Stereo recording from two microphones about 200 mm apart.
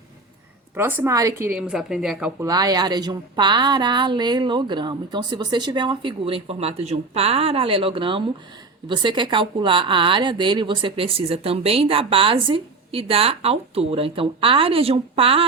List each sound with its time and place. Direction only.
0.8 s speech: 10° right (ahead or behind)
2.4 s speech: 20° right (ahead or behind)